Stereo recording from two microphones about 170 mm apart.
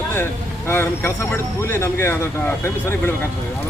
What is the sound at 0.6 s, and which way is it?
Speech, 15° left (ahead or behind).